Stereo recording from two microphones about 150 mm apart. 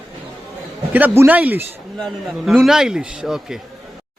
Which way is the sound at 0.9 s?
15° right (ahead or behind).